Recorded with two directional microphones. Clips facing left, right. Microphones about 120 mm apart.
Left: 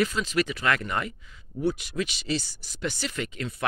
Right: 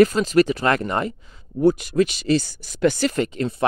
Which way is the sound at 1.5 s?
45° right (ahead or behind).